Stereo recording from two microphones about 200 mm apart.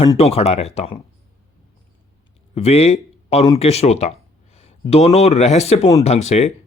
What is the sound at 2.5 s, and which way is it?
Speech, 30° left (ahead or behind).